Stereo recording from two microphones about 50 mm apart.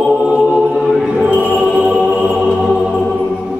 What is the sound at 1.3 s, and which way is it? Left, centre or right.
Music, right.